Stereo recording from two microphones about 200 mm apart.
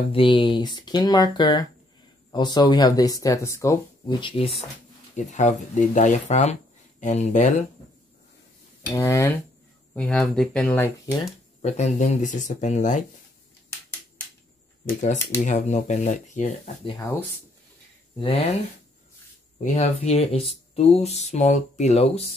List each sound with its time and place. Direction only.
0.1 s speech: 25° left (ahead or behind)
5.1 s speech: 35° left (ahead or behind)
8.9 s speech: 15° left (ahead or behind)
11.6 s speech: 35° left (ahead or behind)
14.9 s speech: 35° left (ahead or behind)
19.6 s speech: 35° left (ahead or behind)